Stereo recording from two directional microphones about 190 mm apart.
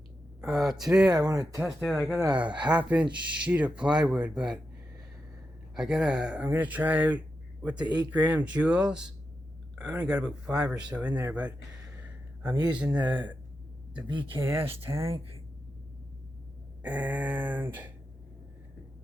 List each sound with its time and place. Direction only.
0.4 s speech: centre (ahead or behind)
1.1 s speech: 20° right (ahead or behind)
1.6 s speech: 5° right (ahead or behind)
5.7 s speech: 5° right (ahead or behind)
14.3 s speech: 10° right (ahead or behind)
16.8 s speech: 10° right (ahead or behind)